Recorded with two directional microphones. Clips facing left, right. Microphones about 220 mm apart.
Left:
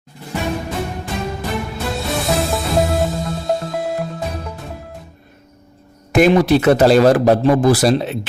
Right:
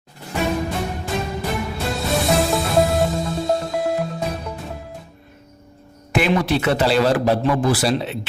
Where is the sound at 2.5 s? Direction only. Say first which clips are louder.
Even; centre (ahead or behind).